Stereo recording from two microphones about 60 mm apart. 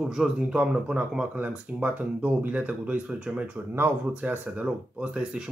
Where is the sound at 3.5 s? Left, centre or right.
Right.